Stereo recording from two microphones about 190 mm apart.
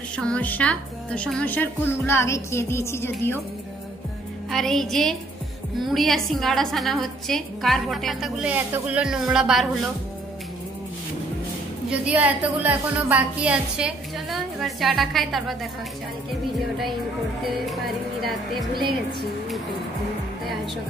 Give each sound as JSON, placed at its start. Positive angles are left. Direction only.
{"t": 0.1, "sound": "a woman's voice", "side_deg": 5}
{"t": 4.5, "sound": "a woman's voice", "side_deg": 0}
{"t": 11.9, "sound": "a woman's voice", "side_deg": -5}
{"t": 18.2, "sound": "a woman's voice", "side_deg": 0}